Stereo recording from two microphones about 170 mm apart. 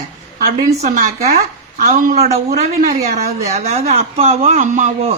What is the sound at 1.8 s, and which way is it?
Speech, 45° right (ahead or behind).